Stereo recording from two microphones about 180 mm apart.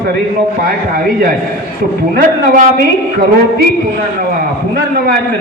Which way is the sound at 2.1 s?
55° right (ahead or behind).